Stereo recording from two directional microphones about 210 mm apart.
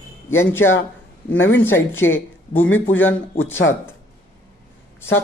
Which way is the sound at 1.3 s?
70° left (ahead or behind).